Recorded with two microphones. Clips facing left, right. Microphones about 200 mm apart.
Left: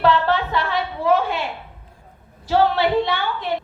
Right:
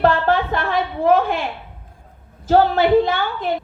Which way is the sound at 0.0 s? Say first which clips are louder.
Right 2 dB; 50° right (ahead or behind).